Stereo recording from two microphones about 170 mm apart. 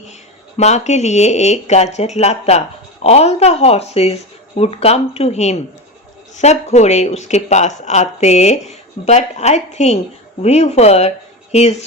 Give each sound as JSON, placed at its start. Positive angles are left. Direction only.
{"t": 0.1, "sound": "speech", "side_deg": 40}